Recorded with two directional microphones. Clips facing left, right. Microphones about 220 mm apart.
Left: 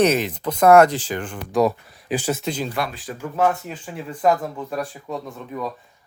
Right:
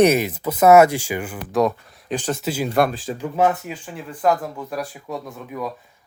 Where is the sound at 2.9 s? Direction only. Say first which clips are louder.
Right 4 dB; 25° right (ahead or behind).